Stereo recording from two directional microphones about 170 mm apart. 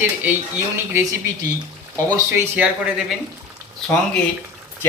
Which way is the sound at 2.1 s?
15° right (ahead or behind).